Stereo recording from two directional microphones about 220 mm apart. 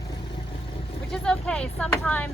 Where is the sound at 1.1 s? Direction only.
5° left (ahead or behind).